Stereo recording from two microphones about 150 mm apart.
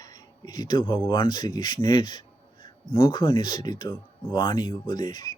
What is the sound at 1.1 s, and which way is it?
Speech, 30° left (ahead or behind).